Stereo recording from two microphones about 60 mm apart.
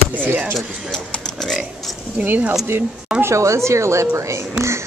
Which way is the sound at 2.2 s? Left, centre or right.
Right.